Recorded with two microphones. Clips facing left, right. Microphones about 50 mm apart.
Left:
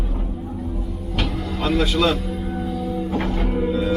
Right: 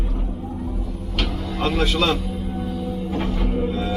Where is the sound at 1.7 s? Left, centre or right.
Centre.